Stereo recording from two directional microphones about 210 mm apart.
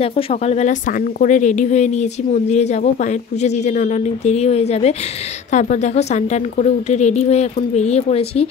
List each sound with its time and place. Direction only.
0.0 s speech: 30° left (ahead or behind)